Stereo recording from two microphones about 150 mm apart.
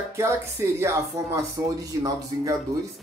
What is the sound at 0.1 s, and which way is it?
Speech, 20° right (ahead or behind).